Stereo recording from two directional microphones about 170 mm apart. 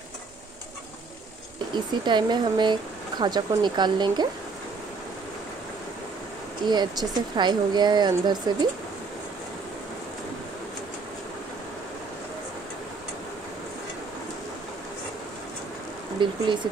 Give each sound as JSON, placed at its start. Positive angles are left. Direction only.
{"t": 1.7, "sound": "speech", "side_deg": -25}
{"t": 6.6, "sound": "speech", "side_deg": -25}
{"t": 16.2, "sound": "speech", "side_deg": -30}